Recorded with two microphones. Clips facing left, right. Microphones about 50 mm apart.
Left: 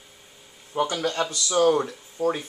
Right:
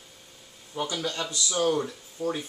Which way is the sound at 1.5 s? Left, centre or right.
Left.